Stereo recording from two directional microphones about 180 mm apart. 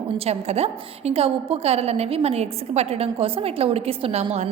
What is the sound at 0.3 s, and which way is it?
A woman's voice, 35° right (ahead or behind).